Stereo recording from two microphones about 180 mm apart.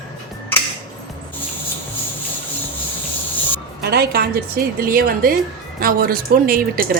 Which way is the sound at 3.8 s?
60° right (ahead or behind).